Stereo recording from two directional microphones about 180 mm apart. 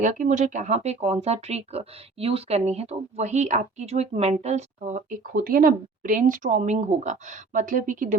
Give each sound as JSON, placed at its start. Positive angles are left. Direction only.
{"t": 0.0, "sound": "speech", "side_deg": -45}